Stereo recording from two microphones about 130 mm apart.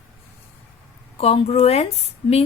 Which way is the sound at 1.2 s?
50° left (ahead or behind).